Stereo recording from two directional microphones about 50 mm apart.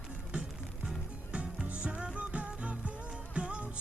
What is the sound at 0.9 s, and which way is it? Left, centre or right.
Music, right.